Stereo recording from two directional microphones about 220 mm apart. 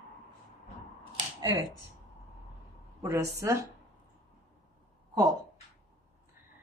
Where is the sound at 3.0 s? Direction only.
15° right (ahead or behind).